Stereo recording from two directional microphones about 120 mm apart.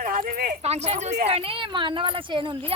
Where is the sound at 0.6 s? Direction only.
65° right (ahead or behind); by 2.7 s 45° right (ahead or behind).